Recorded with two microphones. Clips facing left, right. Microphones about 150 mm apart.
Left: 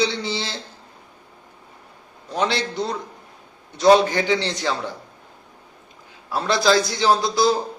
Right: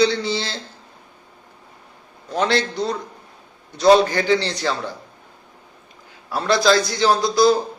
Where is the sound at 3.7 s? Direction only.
15° left (ahead or behind).